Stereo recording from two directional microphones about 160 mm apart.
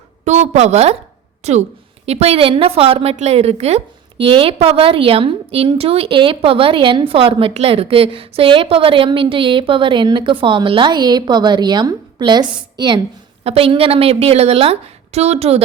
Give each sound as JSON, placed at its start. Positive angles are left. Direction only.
{"t": 0.3, "sound": "a woman's voice", "side_deg": -45}